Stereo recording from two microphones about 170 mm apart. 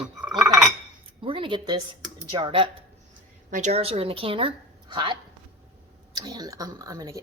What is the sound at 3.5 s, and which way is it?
Speech, 45° right (ahead or behind).